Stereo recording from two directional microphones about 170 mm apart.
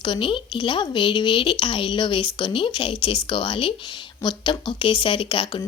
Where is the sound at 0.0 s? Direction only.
30° left (ahead or behind).